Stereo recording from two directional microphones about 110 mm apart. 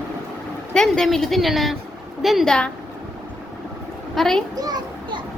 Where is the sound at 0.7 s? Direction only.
5° left (ahead or behind).